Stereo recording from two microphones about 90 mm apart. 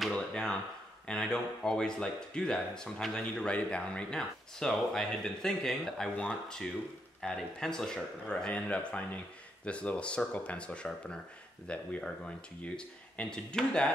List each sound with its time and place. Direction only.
0.1 s a sound: 10° left (ahead or behind)
1.0 s speech: 10° left (ahead or behind)
6.1 s speech: 15° left (ahead or behind)
7.2 s speech: 5° left (ahead or behind)